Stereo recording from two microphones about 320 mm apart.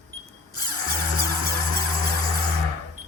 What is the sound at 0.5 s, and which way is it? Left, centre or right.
Music, right.